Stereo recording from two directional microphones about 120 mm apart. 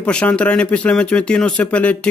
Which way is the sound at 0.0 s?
10° left (ahead or behind).